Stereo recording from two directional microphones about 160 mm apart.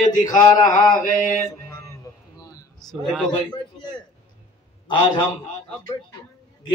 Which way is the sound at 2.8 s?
Centre (ahead or behind).